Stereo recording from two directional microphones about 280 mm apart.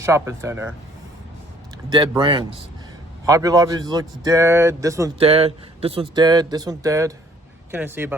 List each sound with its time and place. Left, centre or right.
0.0 s a man's voice: centre
1.9 s a man's voice: centre